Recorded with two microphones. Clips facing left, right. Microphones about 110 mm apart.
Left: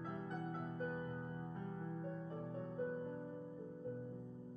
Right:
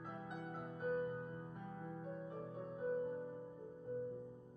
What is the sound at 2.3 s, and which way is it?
Music, 15° right (ahead or behind).